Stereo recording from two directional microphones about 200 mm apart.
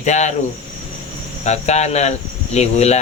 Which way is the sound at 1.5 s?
35° left (ahead or behind).